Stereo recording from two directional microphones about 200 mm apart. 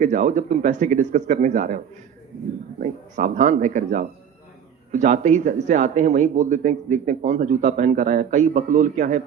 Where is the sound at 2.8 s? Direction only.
40° right (ahead or behind).